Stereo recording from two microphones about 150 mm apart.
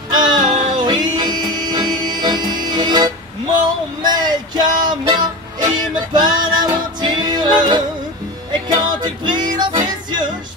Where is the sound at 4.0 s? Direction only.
30° right (ahead or behind).